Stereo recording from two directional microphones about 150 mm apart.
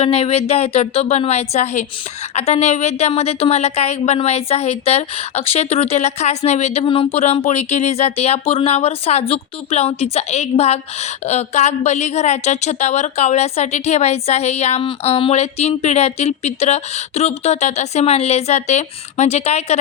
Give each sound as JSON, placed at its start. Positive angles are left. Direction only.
{"t": 0.0, "sound": "speech", "side_deg": 40}
{"t": 6.8, "sound": "speech", "side_deg": 35}